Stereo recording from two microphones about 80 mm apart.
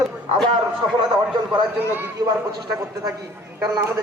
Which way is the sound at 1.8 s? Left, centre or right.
Right.